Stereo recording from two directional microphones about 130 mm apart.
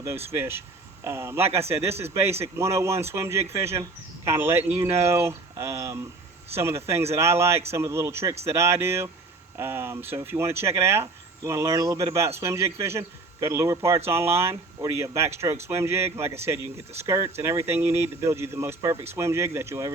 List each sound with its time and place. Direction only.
0.0 s speech: 20° right (ahead or behind)